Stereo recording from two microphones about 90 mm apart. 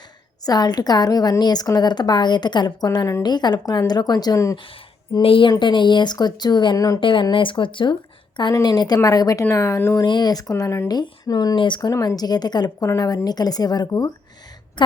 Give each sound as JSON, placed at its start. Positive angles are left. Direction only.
{"t": 0.4, "sound": "a woman's voice", "side_deg": 50}
{"t": 4.5, "sound": "speech", "side_deg": 80}
{"t": 5.5, "sound": "speech", "side_deg": 60}
{"t": 6.7, "sound": "speech", "side_deg": 40}
{"t": 7.0, "sound": "speech", "side_deg": 65}
{"t": 8.6, "sound": "a woman's voice", "side_deg": 50}
{"t": 10.0, "sound": "a woman's voice", "side_deg": 50}
{"t": 10.8, "sound": "a woman's voice", "side_deg": 50}
{"t": 11.9, "sound": "a woman's voice", "side_deg": 45}
{"t": 14.8, "sound": "a woman's voice", "side_deg": 60}